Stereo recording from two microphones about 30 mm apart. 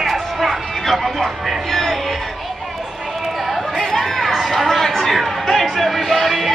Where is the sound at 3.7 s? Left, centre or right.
Centre.